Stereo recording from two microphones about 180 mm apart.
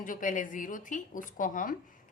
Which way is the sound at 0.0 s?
45° left (ahead or behind).